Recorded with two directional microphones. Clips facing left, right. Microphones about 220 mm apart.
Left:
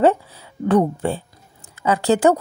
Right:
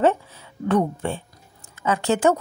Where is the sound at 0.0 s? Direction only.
35° left (ahead or behind).